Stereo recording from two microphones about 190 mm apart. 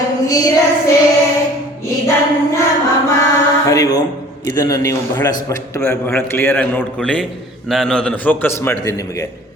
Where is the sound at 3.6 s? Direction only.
20° left (ahead or behind).